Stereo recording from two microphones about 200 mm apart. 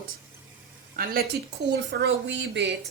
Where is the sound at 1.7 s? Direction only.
60° right (ahead or behind).